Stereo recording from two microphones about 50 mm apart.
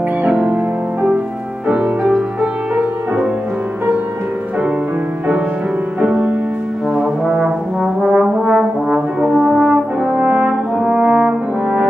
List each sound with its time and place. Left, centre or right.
0.3 s music: right
1.7 s music: centre
5.9 s music: centre
6.9 s brass instrument: centre